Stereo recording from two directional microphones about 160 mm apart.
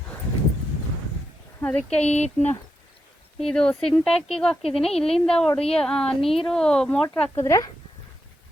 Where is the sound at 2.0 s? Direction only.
45° left (ahead or behind).